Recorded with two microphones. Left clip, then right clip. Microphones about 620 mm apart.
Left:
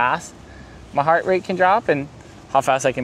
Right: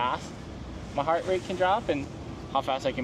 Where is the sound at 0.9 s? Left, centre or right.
Left.